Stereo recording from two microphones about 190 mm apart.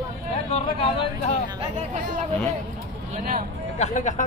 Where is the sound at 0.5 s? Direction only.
30° left (ahead or behind).